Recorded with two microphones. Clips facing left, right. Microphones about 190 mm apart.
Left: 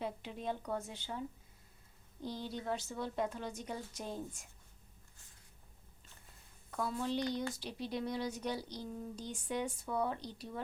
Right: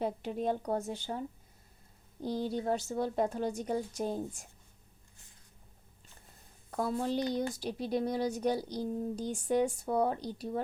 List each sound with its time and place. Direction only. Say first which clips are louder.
0.0 s speech: right 8 dB; 45° right (ahead or behind)
2.2 s a woman's voice: right 8 dB; 40° right (ahead or behind)
6.7 s a woman's voice: right 5 dB; 40° right (ahead or behind)